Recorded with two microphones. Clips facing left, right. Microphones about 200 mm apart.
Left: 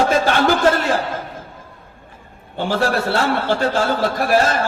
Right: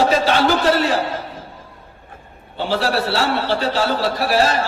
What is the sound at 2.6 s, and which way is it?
A man's voice, 50° left (ahead or behind).